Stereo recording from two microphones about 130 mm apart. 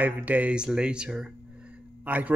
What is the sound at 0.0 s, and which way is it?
A man's voice, 10° right (ahead or behind).